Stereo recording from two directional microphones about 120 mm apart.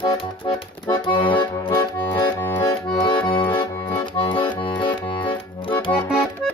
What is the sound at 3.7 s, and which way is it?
Accordion, 20° left (ahead or behind).